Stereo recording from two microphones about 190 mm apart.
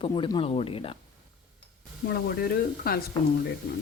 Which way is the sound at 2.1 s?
55° left (ahead or behind).